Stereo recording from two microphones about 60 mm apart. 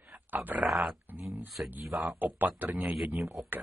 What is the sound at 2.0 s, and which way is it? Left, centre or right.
Speech, right.